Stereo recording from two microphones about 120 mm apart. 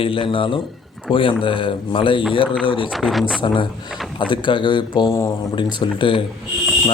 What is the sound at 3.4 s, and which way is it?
A man's voice, 40° left (ahead or behind).